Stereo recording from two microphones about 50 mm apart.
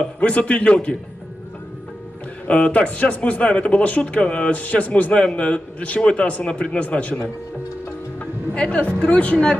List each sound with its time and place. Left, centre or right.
0.2 s a man's voice: left
2.5 s a man's voice: centre
8.2 s music: left
8.8 s a man's voice: left